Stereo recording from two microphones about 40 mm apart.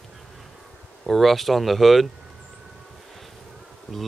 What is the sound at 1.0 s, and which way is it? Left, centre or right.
Speech, centre.